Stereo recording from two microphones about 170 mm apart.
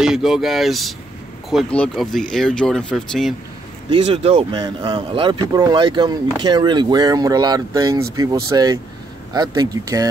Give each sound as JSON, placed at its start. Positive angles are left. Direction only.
{"t": 0.0, "sound": "speech", "side_deg": 0}
{"t": 3.9, "sound": "speech", "side_deg": -30}